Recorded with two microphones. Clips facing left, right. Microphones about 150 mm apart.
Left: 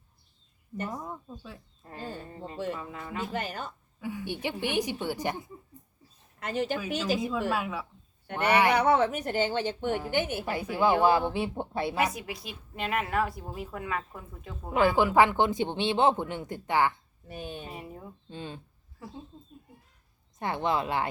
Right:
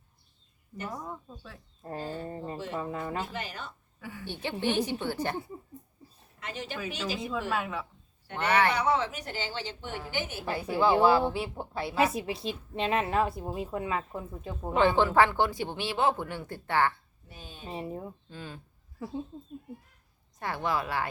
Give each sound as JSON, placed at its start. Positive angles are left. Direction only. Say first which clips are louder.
{"t": 0.9, "sound": "a woman's voice", "louder": "left 1 dB", "side_deg": 5}
{"t": 1.8, "sound": "speech", "louder": "right 4 dB", "side_deg": -35}
{"t": 3.3, "sound": "speech", "louder": "left 4 dB", "side_deg": 45}
{"t": 4.0, "sound": "a woman's voice", "louder": "left 4 dB", "side_deg": 15}
{"t": 6.4, "sound": "speech", "louder": "left 8 dB", "side_deg": 45}
{"t": 6.7, "sound": "a woman's voice", "louder": "left 5 dB", "side_deg": 5}
{"t": 8.7, "sound": "speech", "louder": "left 4 dB", "side_deg": 60}
{"t": 10.4, "sound": "a woman's voice", "louder": "right 4 dB", "side_deg": 15}
{"t": 12.1, "sound": "a woman's voice", "louder": "right 6 dB", "side_deg": -25}
{"t": 14.9, "sound": "speech", "louder": "left 1 dB", "side_deg": 15}
{"t": 17.2, "sound": "speech", "louder": "left 9 dB", "side_deg": 60}
{"t": 17.7, "sound": "a woman's voice", "louder": "right 5 dB", "side_deg": -30}
{"t": 18.3, "sound": "speech", "louder": "left 3 dB", "side_deg": 25}
{"t": 20.4, "sound": "speech", "louder": "left 2 dB", "side_deg": 20}